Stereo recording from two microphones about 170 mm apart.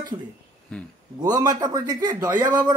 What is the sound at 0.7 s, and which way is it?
Speech, 5° left (ahead or behind).